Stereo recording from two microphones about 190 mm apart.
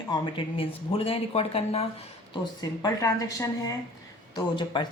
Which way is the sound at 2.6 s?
20° left (ahead or behind).